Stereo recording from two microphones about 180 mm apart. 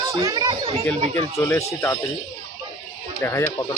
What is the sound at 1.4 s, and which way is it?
Speech, 15° left (ahead or behind).